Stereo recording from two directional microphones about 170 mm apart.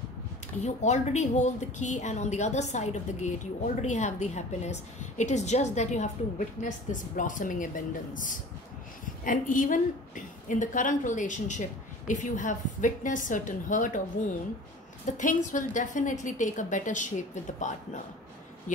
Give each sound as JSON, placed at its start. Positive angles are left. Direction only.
{"t": 0.7, "sound": "a woman's voice", "side_deg": 40}
{"t": 15.0, "sound": "a woman's voice", "side_deg": 50}